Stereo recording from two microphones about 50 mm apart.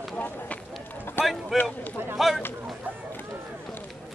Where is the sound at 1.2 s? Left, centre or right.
Left.